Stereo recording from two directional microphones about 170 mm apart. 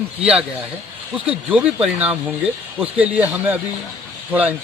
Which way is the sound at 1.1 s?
10° right (ahead or behind).